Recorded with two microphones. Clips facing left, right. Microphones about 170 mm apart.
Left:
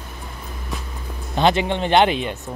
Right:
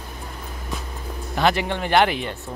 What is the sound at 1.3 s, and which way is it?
Speech, 20° left (ahead or behind).